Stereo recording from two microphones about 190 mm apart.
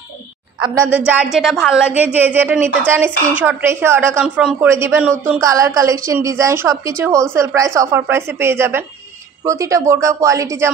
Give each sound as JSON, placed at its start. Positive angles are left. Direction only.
{"t": 0.8, "sound": "a woman's voice", "side_deg": -10}